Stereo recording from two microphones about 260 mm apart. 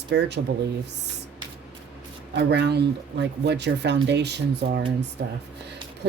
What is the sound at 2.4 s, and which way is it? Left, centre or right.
Speech, right.